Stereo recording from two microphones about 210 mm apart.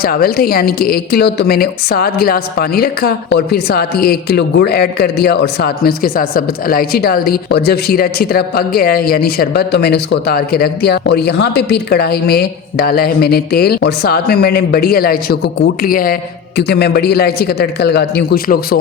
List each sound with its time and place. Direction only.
0.0 s a woman's voice: 45° left (ahead or behind)